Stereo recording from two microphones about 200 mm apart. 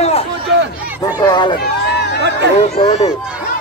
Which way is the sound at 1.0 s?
20° left (ahead or behind).